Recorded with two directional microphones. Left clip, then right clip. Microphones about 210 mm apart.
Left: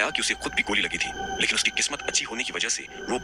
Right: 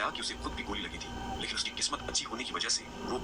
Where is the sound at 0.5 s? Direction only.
20° left (ahead or behind).